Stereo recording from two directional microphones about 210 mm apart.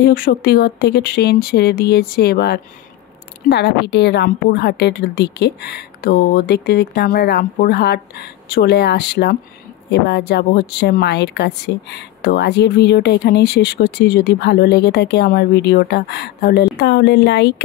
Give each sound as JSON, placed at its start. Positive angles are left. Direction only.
{"t": 0.0, "sound": "speech", "side_deg": 45}